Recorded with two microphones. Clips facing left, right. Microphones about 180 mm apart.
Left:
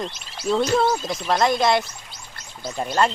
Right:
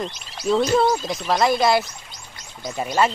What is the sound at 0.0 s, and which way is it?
Speech, centre (ahead or behind).